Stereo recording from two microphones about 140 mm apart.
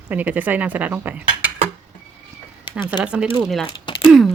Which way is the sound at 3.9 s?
35° left (ahead or behind).